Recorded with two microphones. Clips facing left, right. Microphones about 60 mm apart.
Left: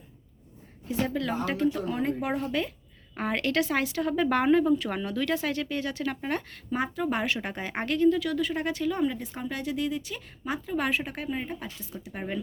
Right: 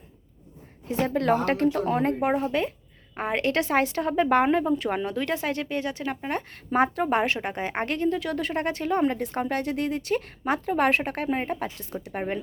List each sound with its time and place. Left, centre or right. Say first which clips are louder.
0.9 s speech: right 6 dB; right
6.7 s speech: right 6 dB; right